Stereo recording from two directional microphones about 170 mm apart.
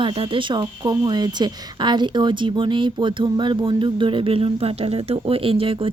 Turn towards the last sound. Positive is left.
turn(degrees=-30)  # may be behind; listen again after turning